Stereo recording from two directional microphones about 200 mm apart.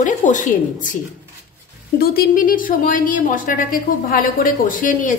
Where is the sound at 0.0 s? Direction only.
40° left (ahead or behind).